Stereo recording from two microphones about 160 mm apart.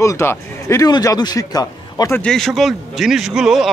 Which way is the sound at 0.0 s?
20° left (ahead or behind).